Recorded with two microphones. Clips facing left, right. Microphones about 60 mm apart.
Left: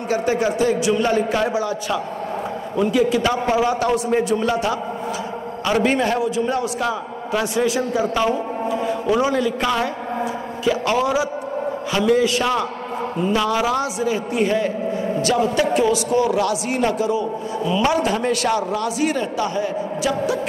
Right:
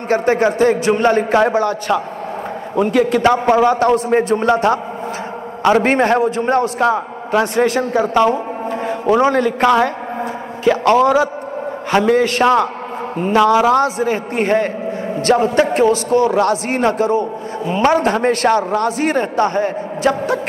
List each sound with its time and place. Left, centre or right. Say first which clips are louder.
0.1 s a man's voice: right 5 dB; right